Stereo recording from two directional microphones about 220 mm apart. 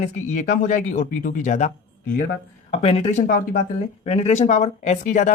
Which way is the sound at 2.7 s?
25° left (ahead or behind).